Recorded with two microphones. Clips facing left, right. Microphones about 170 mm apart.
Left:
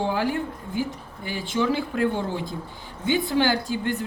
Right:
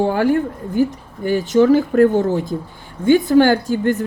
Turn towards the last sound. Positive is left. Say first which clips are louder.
# right 8 dB
turn(degrees=-45)  # may be behind; listen again after turning